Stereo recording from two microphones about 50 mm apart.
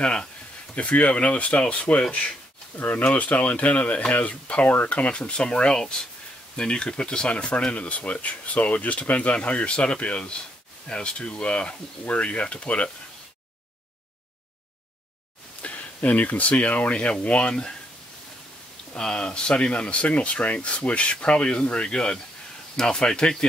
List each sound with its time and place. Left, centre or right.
0.0 s speech: centre
15.6 s speech: left
18.9 s speech: centre